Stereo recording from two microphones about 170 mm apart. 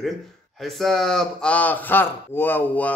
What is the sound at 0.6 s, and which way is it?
Speech, centre (ahead or behind).